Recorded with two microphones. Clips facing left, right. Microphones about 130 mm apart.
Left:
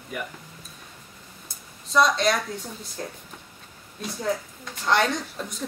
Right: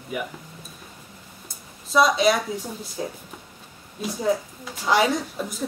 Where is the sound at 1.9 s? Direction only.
5° right (ahead or behind).